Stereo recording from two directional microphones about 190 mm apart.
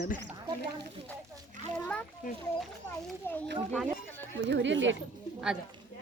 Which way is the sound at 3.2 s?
10° left (ahead or behind).